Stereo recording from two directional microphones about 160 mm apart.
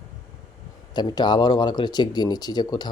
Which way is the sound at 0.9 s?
25° left (ahead or behind).